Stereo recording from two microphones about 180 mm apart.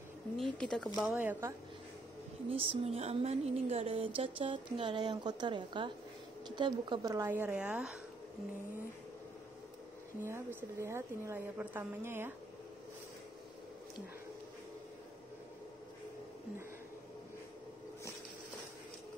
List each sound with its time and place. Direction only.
0.4 s speech: 5° left (ahead or behind)
1.0 s a woman's voice: 10° right (ahead or behind)
2.5 s a sound: 35° right (ahead or behind)
4.2 s a woman's voice: 30° right (ahead or behind); by 7.9 s 5° right (ahead or behind)
10.2 s a woman's voice: 15° right (ahead or behind)